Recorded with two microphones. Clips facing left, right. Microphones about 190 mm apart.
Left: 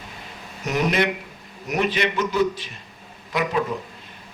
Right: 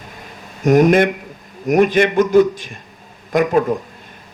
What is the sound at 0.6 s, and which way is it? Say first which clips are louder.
A man's voice: right 10 dB; 50° right (ahead or behind).